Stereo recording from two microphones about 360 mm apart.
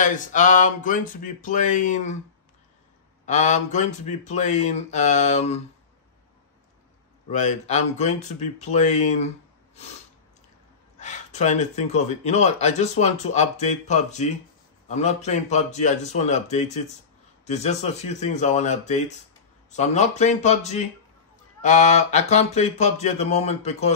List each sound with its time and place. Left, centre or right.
0.0 s speech: left
3.3 s speech: centre
7.2 s speech: centre
11.0 s speech: centre
21.5 s a sound: centre